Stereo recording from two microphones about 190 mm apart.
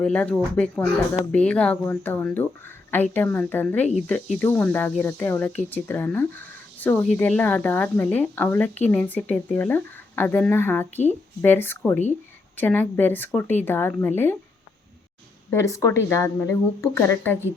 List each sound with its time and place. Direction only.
0.0 s cricket: 5° left (ahead or behind)
15.4 s cricket: 15° left (ahead or behind)